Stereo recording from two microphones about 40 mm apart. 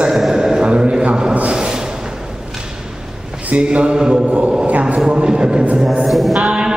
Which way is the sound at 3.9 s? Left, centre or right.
Centre.